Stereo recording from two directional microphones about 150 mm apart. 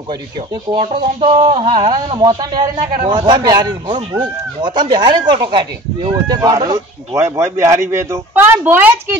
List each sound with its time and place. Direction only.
0.7 s speech: 40° right (ahead or behind); by 9.1 s 15° right (ahead or behind)